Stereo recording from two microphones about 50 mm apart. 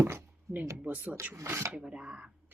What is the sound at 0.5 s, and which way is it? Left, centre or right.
Speech, right.